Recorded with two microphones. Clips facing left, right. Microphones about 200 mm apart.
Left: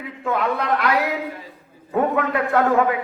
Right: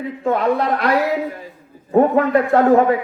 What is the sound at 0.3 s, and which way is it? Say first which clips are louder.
A man's voice: right 4 dB; 35° right (ahead or behind).